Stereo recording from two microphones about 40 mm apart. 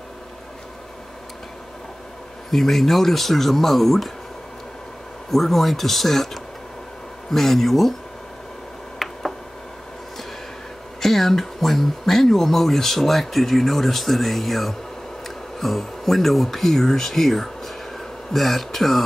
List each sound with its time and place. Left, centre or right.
2.5 s speech: centre
5.3 s speech: centre
9.0 s tick: centre
11.0 s speech: centre